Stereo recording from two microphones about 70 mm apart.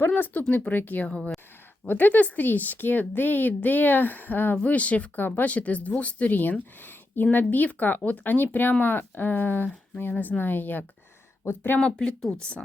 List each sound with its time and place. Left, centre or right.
0.0 s speech: left
11.8 s speech: centre